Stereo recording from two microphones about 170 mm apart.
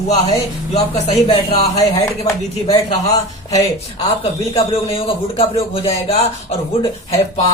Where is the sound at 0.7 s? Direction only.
35° left (ahead or behind).